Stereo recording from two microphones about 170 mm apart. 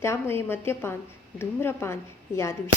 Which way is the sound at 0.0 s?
15° left (ahead or behind).